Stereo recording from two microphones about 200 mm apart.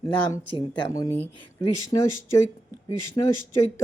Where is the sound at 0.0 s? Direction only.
25° left (ahead or behind).